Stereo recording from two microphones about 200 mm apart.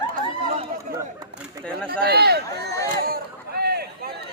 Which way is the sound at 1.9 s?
50° right (ahead or behind).